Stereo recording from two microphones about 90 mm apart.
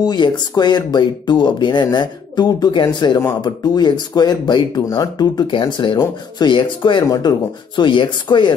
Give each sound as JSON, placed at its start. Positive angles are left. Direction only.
{"t": 0.0, "sound": "speech", "side_deg": 55}
{"t": 5.5, "sound": "speech", "side_deg": 65}